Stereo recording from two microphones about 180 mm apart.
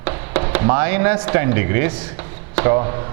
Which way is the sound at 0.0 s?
15° right (ahead or behind).